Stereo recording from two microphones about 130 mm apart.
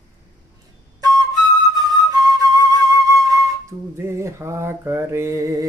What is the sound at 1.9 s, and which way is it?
Flute, 30° right (ahead or behind).